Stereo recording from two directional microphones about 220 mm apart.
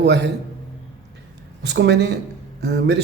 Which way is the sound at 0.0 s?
50° right (ahead or behind).